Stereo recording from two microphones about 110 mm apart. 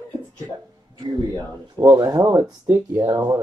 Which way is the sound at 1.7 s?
35° right (ahead or behind).